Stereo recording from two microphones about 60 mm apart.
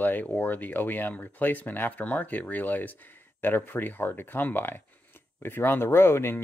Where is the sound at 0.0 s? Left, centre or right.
Left.